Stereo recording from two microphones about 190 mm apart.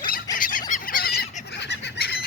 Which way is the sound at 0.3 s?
45° left (ahead or behind).